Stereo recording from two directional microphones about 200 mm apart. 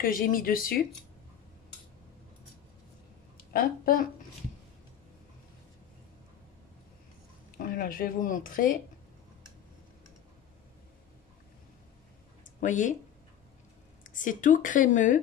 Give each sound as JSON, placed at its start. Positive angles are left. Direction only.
{"t": 0.0, "sound": "speech", "side_deg": 45}
{"t": 3.5, "sound": "speech", "side_deg": 45}
{"t": 7.5, "sound": "speech", "side_deg": 45}
{"t": 12.5, "sound": "speech", "side_deg": 40}
{"t": 14.0, "sound": "a woman's voice", "side_deg": 40}